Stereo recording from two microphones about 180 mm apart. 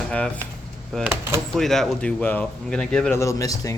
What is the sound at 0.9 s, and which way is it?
Speech, 5° left (ahead or behind).